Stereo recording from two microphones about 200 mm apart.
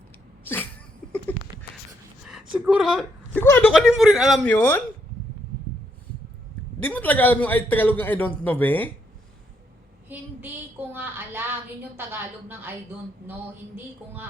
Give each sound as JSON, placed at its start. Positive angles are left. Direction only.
{"t": 0.4, "sound": "sneeze", "side_deg": 10}
{"t": 1.0, "sound": "a sound", "side_deg": 5}
{"t": 2.2, "sound": "a sound", "side_deg": -5}
{"t": 3.4, "sound": "speech", "side_deg": 10}
{"t": 6.8, "sound": "a man's voice", "side_deg": 10}
{"t": 10.1, "sound": "a woman's voice", "side_deg": -10}
{"t": 13.7, "sound": "speech", "side_deg": -10}